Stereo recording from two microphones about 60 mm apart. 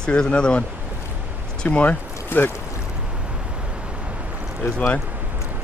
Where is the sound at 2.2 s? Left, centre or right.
Left.